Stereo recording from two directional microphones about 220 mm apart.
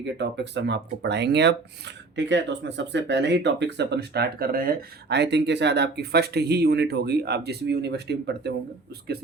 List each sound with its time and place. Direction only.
0.0 s speech: 50° right (ahead or behind)